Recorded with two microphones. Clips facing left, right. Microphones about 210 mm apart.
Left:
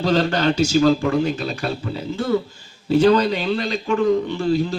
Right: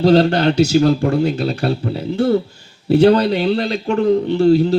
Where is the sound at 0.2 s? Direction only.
60° right (ahead or behind).